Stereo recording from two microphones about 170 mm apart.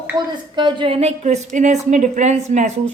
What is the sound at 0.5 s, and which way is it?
A woman's voice, 30° right (ahead or behind).